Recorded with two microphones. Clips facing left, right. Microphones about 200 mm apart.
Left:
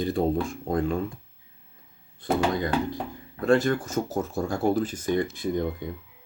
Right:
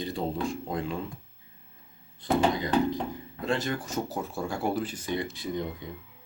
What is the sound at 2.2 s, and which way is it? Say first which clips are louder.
Speech: left 1 dB; 55° left (ahead or behind).